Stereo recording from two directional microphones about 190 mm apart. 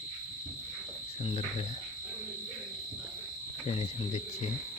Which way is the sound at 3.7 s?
30° left (ahead or behind).